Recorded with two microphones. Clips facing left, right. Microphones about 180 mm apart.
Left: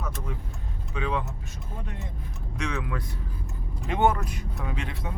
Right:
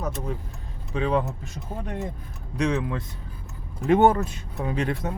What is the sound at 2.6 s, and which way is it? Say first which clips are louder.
Speech: right 7 dB; 30° right (ahead or behind).